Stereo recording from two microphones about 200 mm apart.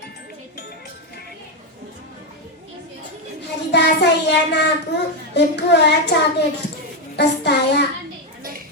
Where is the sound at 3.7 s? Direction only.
60° left (ahead or behind).